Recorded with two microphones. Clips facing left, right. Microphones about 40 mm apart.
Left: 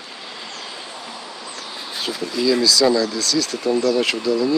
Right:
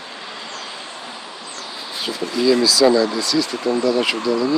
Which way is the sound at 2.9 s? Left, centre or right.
Right.